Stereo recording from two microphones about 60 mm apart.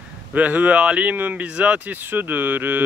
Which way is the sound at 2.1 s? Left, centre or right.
Right.